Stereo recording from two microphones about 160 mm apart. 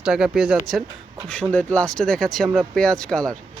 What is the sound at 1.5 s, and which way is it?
Speech, 10° left (ahead or behind).